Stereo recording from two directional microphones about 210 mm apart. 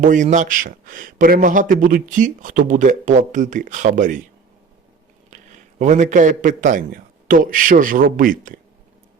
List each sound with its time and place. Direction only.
0.0 s a man's voice: 35° right (ahead or behind)
5.3 s a man's voice: 35° right (ahead or behind)